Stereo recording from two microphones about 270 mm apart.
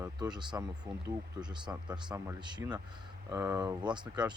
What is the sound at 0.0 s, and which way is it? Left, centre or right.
Speech, centre.